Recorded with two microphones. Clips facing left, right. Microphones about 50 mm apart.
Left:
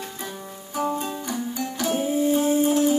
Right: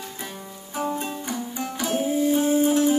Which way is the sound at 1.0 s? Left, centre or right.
Right.